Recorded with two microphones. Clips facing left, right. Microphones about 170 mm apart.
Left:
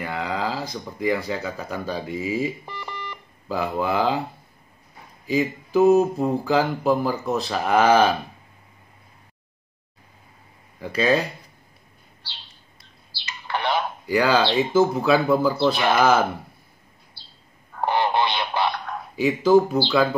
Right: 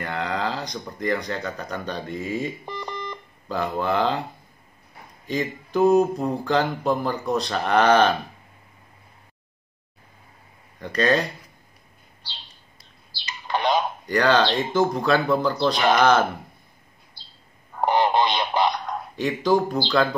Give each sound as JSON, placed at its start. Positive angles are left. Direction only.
{"t": 0.0, "sound": "speech", "side_deg": 5}
{"t": 2.6, "sound": "alarm clock", "side_deg": -15}
{"t": 3.4, "sound": "speech", "side_deg": 5}
{"t": 5.2, "sound": "speech", "side_deg": 5}
{"t": 10.8, "sound": "speech", "side_deg": 5}
{"t": 12.2, "sound": "bird", "side_deg": -15}
{"t": 13.1, "sound": "a sound", "side_deg": -15}
{"t": 14.0, "sound": "speech", "side_deg": 10}
{"t": 17.2, "sound": "bird", "side_deg": -15}
{"t": 17.7, "sound": "radio", "side_deg": -15}
{"t": 19.1, "sound": "speech", "side_deg": 5}